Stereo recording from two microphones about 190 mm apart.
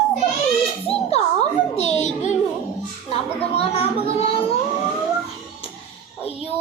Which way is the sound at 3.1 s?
30° left (ahead or behind).